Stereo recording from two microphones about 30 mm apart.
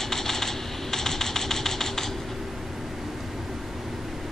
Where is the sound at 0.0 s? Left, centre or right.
Centre.